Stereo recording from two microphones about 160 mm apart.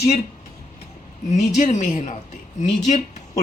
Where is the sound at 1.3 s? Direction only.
45° left (ahead or behind).